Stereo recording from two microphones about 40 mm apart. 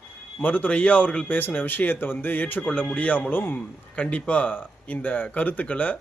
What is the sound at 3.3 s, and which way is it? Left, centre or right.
Speech, left.